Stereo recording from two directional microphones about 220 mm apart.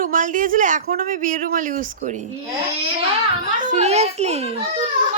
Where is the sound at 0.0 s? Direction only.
35° right (ahead or behind).